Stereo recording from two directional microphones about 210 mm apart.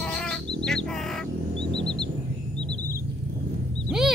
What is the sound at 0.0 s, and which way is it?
Bird, 5° left (ahead or behind).